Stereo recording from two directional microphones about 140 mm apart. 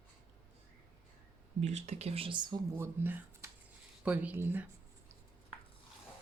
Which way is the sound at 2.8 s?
15° right (ahead or behind).